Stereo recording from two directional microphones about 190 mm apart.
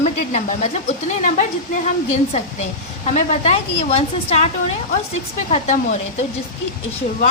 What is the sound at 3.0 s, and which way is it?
Speech, 35° left (ahead or behind).